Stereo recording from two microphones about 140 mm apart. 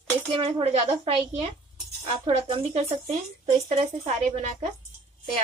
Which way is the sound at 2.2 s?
45° right (ahead or behind).